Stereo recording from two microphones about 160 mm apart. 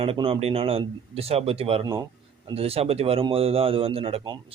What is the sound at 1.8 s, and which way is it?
Speech, 25° right (ahead or behind).